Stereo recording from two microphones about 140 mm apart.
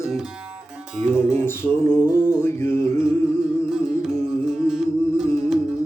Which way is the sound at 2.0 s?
10° right (ahead or behind).